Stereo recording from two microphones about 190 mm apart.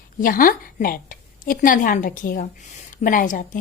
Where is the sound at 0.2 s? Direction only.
45° left (ahead or behind).